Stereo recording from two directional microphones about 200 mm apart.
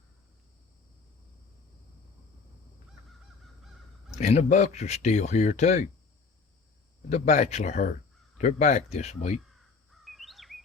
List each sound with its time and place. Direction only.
4.1 s speech: 35° left (ahead or behind)
7.1 s speech: 35° left (ahead or behind)
9.9 s bird vocalization: centre (ahead or behind)